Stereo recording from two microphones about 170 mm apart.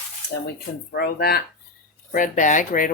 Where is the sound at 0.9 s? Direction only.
65° left (ahead or behind).